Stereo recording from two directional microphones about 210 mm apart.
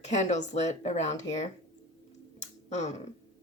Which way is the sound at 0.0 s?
35° left (ahead or behind).